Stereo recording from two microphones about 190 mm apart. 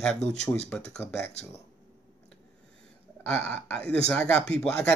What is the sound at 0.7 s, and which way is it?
Speech, 5° left (ahead or behind).